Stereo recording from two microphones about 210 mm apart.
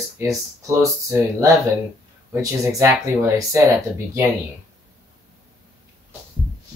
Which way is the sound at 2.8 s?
15° right (ahead or behind).